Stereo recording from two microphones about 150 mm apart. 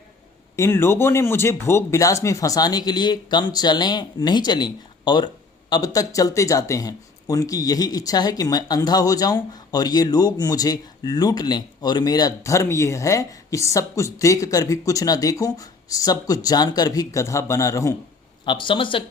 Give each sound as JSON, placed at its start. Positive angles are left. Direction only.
{"t": 0.5, "sound": "speech", "side_deg": 15}
{"t": 18.4, "sound": "speech", "side_deg": 35}